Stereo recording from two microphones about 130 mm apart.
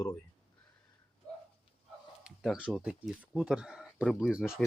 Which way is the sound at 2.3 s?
5° right (ahead or behind).